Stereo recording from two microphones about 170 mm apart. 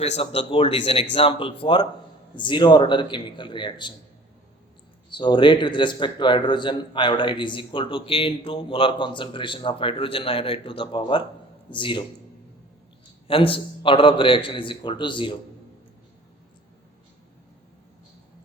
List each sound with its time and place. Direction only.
0.0 s a man's voice: 35° left (ahead or behind)
5.1 s a man's voice: 25° left (ahead or behind)
13.2 s a man's voice: 30° left (ahead or behind)